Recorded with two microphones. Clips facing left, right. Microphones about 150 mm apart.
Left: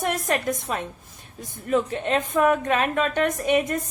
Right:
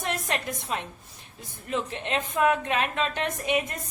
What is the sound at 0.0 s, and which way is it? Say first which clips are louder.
A woman's voice: left 6 dB; 45° left (ahead or behind).